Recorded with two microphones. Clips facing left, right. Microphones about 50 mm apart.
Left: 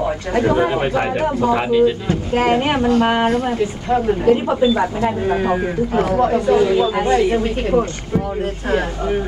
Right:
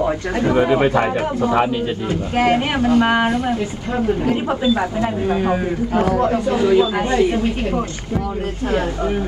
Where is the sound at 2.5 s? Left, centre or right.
Centre.